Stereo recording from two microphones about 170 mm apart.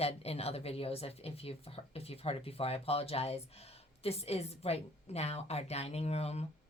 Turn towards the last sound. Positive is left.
turn(degrees=40)  # may be behind; listen again after turning